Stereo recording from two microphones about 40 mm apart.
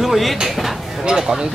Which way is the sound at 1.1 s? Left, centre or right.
Centre.